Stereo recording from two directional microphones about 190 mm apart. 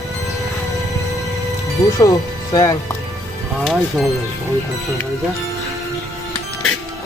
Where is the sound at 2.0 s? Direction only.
20° left (ahead or behind).